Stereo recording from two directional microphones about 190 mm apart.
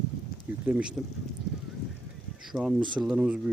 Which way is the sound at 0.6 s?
10° right (ahead or behind).